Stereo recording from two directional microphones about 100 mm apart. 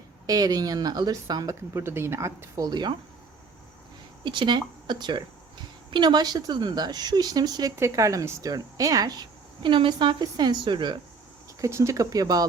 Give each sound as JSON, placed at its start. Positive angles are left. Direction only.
{"t": 0.3, "sound": "a woman's voice", "side_deg": -40}
{"t": 1.7, "sound": "speech", "side_deg": -25}
{"t": 4.2, "sound": "a woman's voice", "side_deg": -50}
{"t": 9.6, "sound": "speech", "side_deg": -55}
{"t": 11.6, "sound": "a woman's voice", "side_deg": -30}